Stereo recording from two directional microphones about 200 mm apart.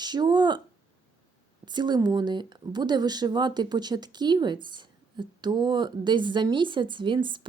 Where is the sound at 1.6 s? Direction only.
20° right (ahead or behind).